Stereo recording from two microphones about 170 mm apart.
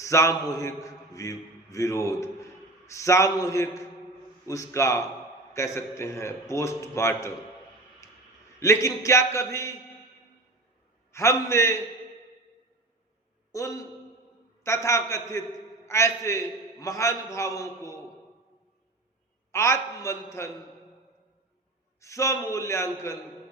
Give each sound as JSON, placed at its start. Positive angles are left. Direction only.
{"t": 0.0, "sound": "a man's voice", "side_deg": 15}
{"t": 8.0, "sound": "clicking", "side_deg": 15}
{"t": 8.5, "sound": "a man's voice", "side_deg": 15}
{"t": 11.1, "sound": "a man's voice", "side_deg": 15}
{"t": 13.5, "sound": "a man's voice", "side_deg": 20}
{"t": 19.5, "sound": "a man's voice", "side_deg": 15}
{"t": 22.0, "sound": "a man's voice", "side_deg": 15}